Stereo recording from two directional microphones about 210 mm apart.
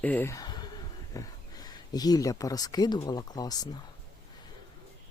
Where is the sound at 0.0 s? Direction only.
10° left (ahead or behind).